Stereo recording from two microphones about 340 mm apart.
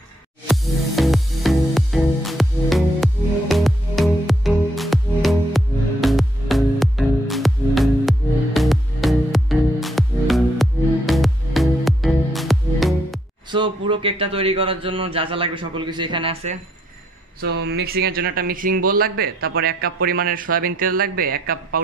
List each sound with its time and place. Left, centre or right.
0.5 s music: centre
13.5 s a man's voice: centre
17.4 s speech: right